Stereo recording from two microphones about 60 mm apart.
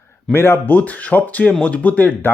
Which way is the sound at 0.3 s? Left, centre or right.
Left.